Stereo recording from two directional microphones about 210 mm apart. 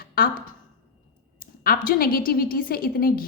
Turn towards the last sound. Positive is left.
turn(degrees=45)  # may be behind; listen again after turning